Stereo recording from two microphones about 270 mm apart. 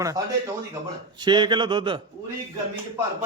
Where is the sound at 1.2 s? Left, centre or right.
Centre.